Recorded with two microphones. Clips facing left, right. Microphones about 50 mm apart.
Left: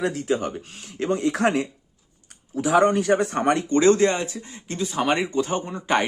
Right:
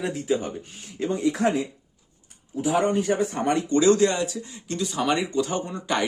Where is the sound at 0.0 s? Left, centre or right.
Left.